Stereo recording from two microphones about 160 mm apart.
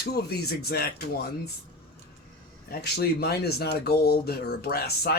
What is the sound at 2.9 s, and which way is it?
Speech, 80° left.